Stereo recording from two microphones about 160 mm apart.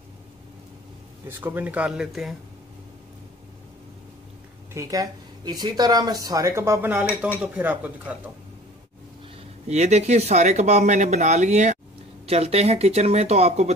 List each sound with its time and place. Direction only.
1.4 s speech: 10° right (ahead or behind)
4.7 s speech: 20° right (ahead or behind)
9.7 s speech: 45° right (ahead or behind)